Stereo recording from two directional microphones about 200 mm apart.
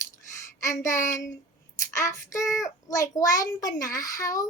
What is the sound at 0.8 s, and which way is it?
A woman's voice, 15° left (ahead or behind).